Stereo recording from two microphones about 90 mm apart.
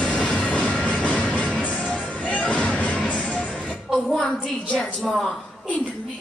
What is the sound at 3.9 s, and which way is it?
A woman's voice, 5° left (ahead or behind).